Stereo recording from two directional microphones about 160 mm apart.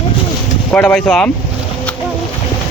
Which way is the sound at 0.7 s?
10° left (ahead or behind).